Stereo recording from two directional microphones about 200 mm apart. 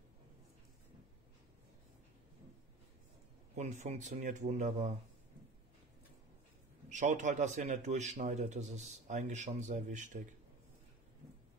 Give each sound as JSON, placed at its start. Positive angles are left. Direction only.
{"t": 3.5, "sound": "a man's voice", "side_deg": -35}
{"t": 6.9, "sound": "a man's voice", "side_deg": -40}